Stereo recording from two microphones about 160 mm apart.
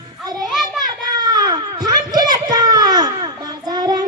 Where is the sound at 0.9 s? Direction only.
25° right (ahead or behind).